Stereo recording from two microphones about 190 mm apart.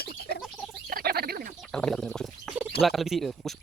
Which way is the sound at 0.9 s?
50° right (ahead or behind).